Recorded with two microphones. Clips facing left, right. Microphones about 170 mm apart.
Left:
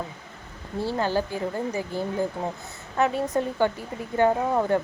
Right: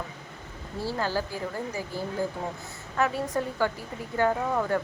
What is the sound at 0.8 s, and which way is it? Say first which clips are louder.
A woman's voice: left 4 dB; 20° left (ahead or behind).